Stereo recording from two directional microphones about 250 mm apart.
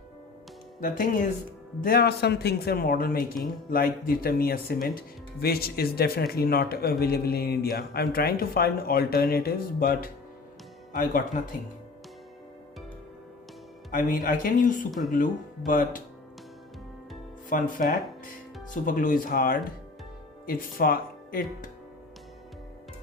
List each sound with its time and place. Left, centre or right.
0.8 s speech: left
13.9 s speech: left
17.5 s speech: left